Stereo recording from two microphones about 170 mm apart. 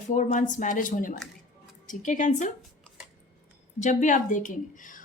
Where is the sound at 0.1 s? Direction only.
45° left (ahead or behind).